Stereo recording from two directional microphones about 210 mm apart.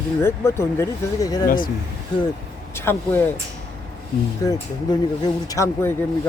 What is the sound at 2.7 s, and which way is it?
Speech, 10° left (ahead or behind).